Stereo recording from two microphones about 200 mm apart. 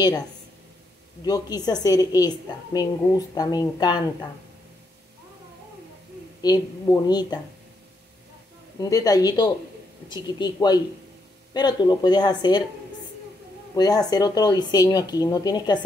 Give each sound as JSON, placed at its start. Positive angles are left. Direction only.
{"t": 1.2, "sound": "a woman's voice", "side_deg": 20}
{"t": 6.4, "sound": "a woman's voice", "side_deg": 20}
{"t": 8.7, "sound": "a woman's voice", "side_deg": 15}
{"t": 13.7, "sound": "a woman's voice", "side_deg": 20}